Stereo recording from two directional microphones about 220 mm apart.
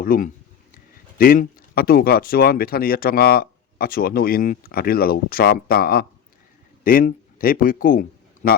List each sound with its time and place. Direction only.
0.0 s speech: 40° left (ahead or behind)